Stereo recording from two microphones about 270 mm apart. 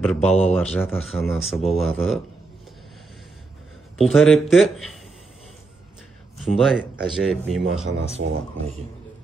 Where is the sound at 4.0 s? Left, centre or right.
Centre.